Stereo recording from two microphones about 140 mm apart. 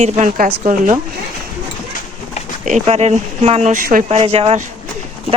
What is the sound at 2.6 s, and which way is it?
Speech, 55° right (ahead or behind).